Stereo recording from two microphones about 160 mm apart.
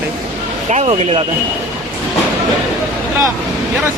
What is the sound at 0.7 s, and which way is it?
Speech, 40° right (ahead or behind).